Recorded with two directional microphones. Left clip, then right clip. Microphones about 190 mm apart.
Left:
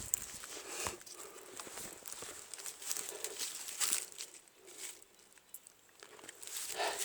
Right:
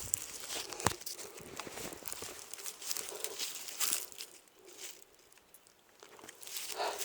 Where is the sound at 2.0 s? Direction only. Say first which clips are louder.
Right 3 dB; 45° right (ahead or behind).